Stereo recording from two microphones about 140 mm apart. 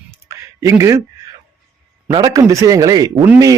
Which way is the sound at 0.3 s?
20° right (ahead or behind).